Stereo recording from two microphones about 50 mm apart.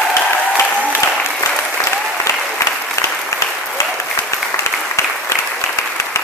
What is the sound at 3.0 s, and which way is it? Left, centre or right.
Applause, left.